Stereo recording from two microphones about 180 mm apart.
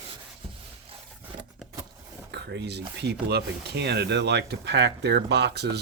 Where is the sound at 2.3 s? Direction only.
70° right (ahead or behind).